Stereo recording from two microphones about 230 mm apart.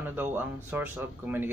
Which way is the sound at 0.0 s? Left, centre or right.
Centre.